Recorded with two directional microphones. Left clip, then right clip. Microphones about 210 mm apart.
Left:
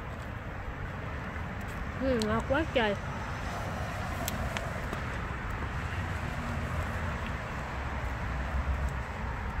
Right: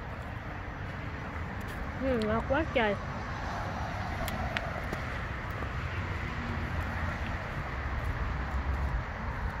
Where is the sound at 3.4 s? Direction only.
60° left (ahead or behind).